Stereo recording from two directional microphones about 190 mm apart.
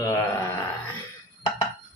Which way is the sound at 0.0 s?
15° left (ahead or behind).